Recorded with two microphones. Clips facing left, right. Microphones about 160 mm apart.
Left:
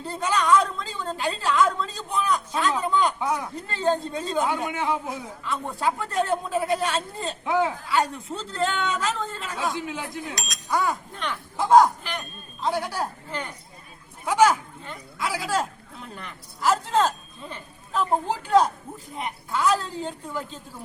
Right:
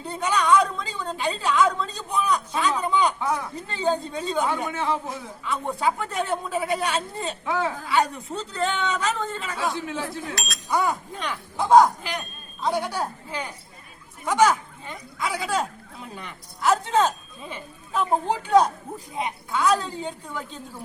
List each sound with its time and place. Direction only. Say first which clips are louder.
0.0 s a woman's voice: even; centre (ahead or behind)
3.2 s speech: even; 10° left (ahead or behind)
3.5 s a man's voice: left 1 dB; centre (ahead or behind)
5.5 s a man's voice: right 2 dB; centre (ahead or behind)
7.4 s speech: left 3 dB; 15° left (ahead or behind)
7.9 s a man's voice: right 1 dB; centre (ahead or behind)
9.7 s speech: right 1 dB; 15° left (ahead or behind)
10.7 s a man's voice: right 1 dB; centre (ahead or behind)
14.3 s a man's voice: even; 10° left (ahead or behind)